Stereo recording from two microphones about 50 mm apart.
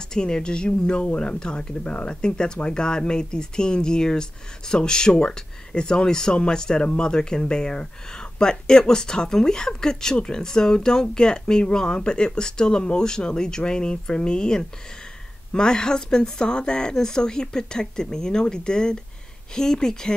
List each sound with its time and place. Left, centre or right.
0.1 s speech: centre